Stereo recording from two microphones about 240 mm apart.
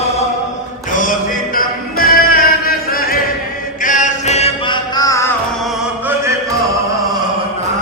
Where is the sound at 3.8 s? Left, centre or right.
Left; by 5.3 s centre.